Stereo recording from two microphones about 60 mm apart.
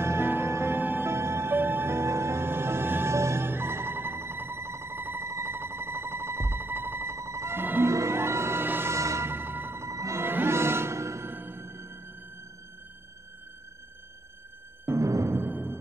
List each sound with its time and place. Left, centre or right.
0.0 s music: right
1.1 s music: right
7.6 s music: right
7.9 s music: right
8.6 s music: right
8.9 s music: right
9.3 s music: right
9.8 s music: right
10.2 s music: right
11.3 s music: right
15.0 s music: right
15.3 s music: right